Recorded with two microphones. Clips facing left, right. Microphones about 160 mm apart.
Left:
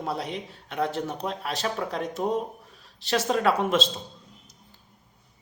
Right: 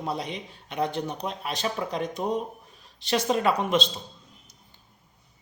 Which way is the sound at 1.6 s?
20° right (ahead or behind).